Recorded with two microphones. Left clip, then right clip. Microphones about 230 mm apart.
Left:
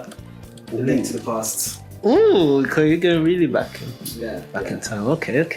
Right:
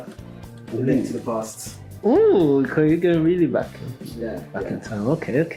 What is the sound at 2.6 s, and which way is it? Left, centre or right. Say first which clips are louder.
Speech: left 2 dB; centre.